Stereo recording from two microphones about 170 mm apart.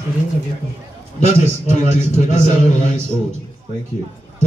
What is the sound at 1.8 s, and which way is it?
Speech, 45° left (ahead or behind).